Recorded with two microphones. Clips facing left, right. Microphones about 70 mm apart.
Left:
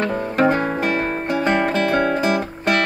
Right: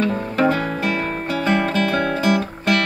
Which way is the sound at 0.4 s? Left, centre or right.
Left.